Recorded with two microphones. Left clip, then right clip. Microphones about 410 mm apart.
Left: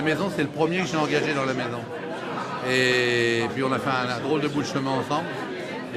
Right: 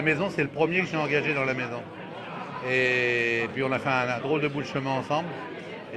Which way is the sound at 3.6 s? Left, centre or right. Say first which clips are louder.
Left 1 dB; right.